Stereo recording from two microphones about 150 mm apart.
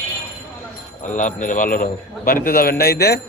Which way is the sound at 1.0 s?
60° left (ahead or behind).